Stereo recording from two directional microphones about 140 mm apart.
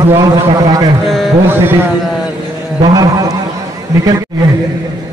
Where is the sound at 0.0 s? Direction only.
20° right (ahead or behind).